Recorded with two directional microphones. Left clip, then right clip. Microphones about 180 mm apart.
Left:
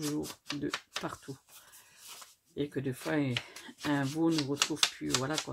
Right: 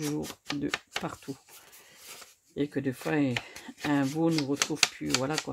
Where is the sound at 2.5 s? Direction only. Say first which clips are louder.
Right 4 dB; 60° right (ahead or behind).